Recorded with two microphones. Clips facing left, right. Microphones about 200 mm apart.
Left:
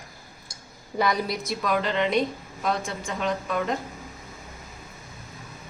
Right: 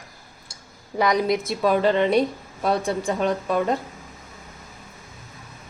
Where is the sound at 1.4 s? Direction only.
30° right (ahead or behind).